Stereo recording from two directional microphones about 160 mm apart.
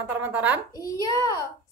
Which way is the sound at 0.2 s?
10° right (ahead or behind).